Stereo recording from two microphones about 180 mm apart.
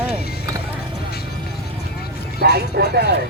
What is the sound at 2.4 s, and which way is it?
Speech, 65° right (ahead or behind).